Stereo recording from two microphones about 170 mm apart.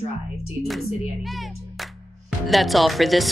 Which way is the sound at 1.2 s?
Centre (ahead or behind).